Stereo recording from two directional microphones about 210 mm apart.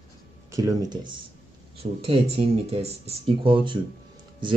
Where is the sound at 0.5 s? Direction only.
15° right (ahead or behind).